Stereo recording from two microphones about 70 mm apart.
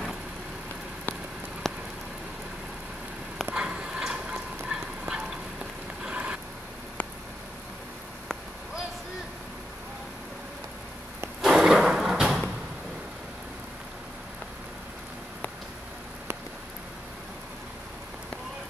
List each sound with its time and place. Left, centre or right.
1.6 s rain on surface: centre
3.5 s fowl: centre
6.0 s vehicle: centre
11.4 s thump: centre